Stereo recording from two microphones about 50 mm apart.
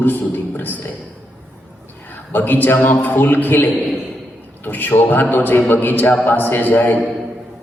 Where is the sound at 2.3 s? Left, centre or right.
Left.